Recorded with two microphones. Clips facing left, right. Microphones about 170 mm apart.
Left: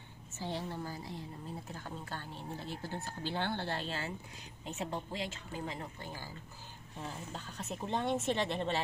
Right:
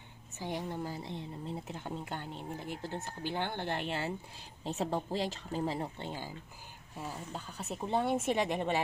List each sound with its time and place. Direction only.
0.4 s speech: 15° right (ahead or behind)
4.6 s speech: 35° right (ahead or behind)
7.0 s a woman's voice: 10° right (ahead or behind)